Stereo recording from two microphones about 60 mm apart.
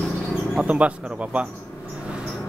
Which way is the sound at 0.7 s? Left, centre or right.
Right.